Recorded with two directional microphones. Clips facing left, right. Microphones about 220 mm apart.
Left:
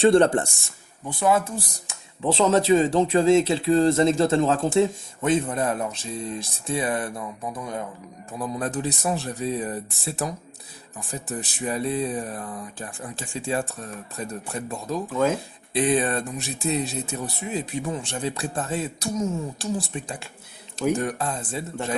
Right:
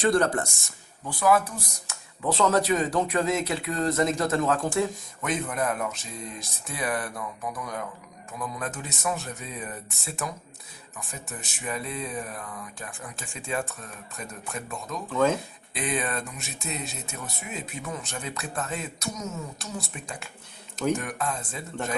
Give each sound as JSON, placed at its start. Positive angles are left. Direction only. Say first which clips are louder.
{"t": 0.0, "sound": "a man's voice", "louder": "left 6 dB", "side_deg": 25}
{"t": 15.1, "sound": "speech", "louder": "even", "side_deg": 10}
{"t": 15.7, "sound": "a man's voice", "louder": "left 8 dB", "side_deg": 30}